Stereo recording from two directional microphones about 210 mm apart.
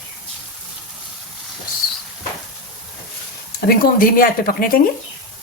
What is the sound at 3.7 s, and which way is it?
A woman's voice, 45° left (ahead or behind).